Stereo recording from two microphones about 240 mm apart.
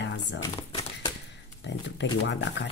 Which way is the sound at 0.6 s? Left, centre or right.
Centre.